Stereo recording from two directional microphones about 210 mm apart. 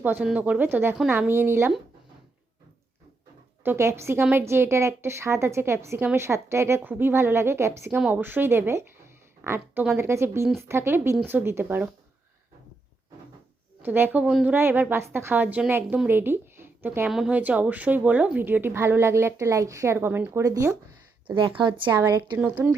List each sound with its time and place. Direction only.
0.0 s a woman's voice: 10° right (ahead or behind)
3.6 s a woman's voice: 10° right (ahead or behind)
13.8 s a woman's voice: 10° right (ahead or behind)
21.9 s a woman's voice: 10° right (ahead or behind)